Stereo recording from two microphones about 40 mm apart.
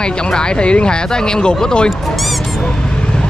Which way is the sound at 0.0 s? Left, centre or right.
Left.